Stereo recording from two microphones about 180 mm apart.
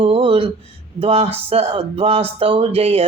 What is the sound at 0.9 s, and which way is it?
Speech, 35° right (ahead or behind).